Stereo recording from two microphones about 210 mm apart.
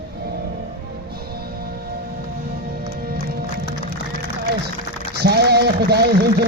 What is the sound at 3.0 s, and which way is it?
Music, 45° right (ahead or behind).